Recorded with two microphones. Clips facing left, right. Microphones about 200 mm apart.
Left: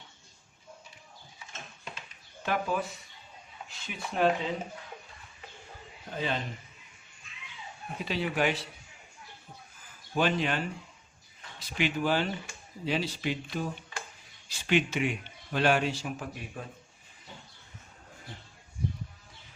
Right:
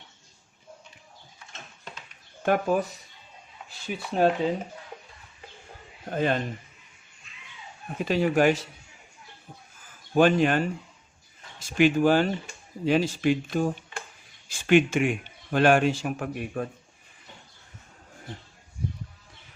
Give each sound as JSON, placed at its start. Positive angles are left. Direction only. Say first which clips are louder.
{"t": 2.4, "sound": "speech", "louder": "right 7 dB", "side_deg": -45}
{"t": 3.8, "sound": "speech", "louder": "right 5 dB", "side_deg": -30}
{"t": 6.1, "sound": "speech", "louder": "right 7 dB", "side_deg": -50}
{"t": 8.0, "sound": "speech", "louder": "right 8 dB", "side_deg": -45}
{"t": 10.2, "sound": "speech", "louder": "right 8 dB", "side_deg": -50}
{"t": 11.6, "sound": "speech", "louder": "right 9 dB", "side_deg": -50}